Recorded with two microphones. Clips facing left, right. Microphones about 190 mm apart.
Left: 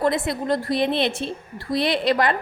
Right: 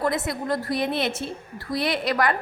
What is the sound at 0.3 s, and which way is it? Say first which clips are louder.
A woman's voice: left 3 dB; 25° left (ahead or behind).